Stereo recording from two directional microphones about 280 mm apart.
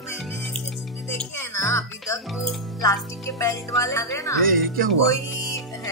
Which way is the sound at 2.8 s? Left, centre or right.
Centre.